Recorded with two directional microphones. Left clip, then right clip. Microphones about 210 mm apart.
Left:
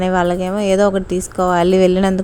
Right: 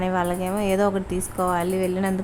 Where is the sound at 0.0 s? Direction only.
25° left (ahead or behind).